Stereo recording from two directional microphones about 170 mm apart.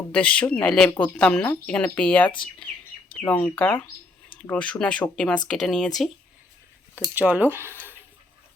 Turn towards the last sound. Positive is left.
turn(degrees=-10)  # may be behind; listen again after turning